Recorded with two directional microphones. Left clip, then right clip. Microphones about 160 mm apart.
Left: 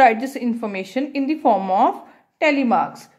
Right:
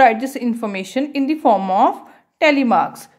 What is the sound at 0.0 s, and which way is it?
A woman's voice, 20° right (ahead or behind).